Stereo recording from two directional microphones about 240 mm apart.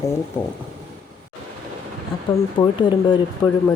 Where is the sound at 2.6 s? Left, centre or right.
Centre.